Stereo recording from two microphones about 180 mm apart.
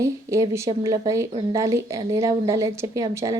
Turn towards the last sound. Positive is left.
turn(degrees=-20)  # may be behind; listen again after turning